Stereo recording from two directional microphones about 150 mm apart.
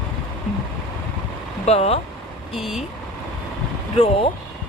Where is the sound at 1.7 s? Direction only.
45° left (ahead or behind).